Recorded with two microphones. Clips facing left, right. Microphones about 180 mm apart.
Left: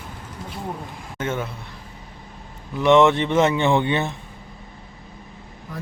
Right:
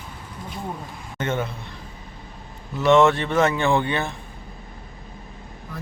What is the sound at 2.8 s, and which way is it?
Speech, 20° left (ahead or behind).